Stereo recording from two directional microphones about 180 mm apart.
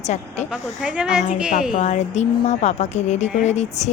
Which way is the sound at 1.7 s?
40° left (ahead or behind).